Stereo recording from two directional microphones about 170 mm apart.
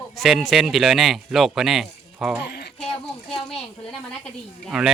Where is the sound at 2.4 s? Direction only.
70° left (ahead or behind).